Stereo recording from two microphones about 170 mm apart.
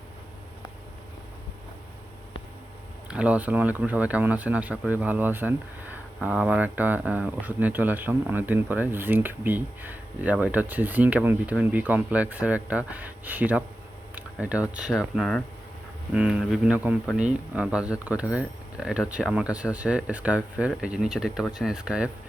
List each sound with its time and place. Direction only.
3.1 s speech: 5° right (ahead or behind)
14.2 s a sound: 5° right (ahead or behind)
14.7 s speech: 5° right (ahead or behind)